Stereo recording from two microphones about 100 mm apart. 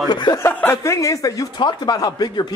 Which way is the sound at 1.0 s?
35° left (ahead or behind).